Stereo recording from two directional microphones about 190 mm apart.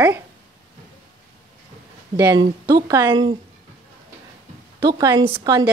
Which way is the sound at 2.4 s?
20° right (ahead or behind).